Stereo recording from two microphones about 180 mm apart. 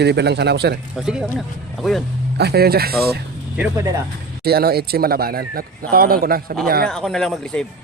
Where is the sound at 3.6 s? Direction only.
15° right (ahead or behind).